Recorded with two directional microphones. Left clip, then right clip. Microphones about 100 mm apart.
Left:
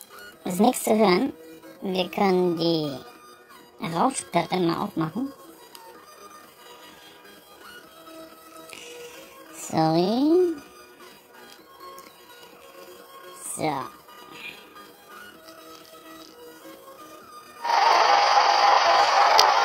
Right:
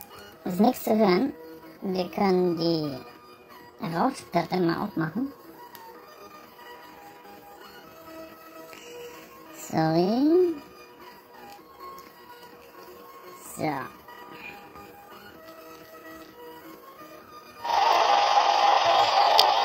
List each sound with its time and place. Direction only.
0.4 s speech: 35° left (ahead or behind)
9.6 s speech: 30° left (ahead or behind)
13.6 s speech: 35° left (ahead or behind)
17.6 s a sound: 15° left (ahead or behind)